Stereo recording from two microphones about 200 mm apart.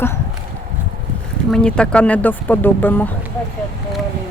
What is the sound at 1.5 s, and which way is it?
Speech, 5° left (ahead or behind).